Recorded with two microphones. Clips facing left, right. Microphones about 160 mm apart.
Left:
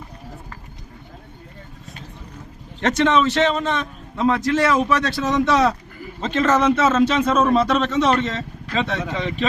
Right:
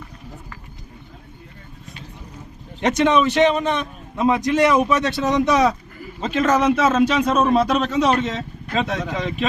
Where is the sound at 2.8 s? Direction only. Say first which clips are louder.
Right 1 dB; 15° right (ahead or behind).